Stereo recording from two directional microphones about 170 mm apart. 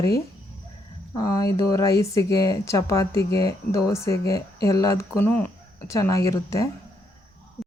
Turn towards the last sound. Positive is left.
turn(degrees=20)  # may be behind; listen again after turning